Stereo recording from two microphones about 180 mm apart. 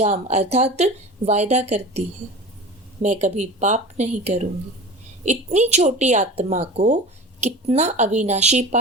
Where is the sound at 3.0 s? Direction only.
40° right (ahead or behind).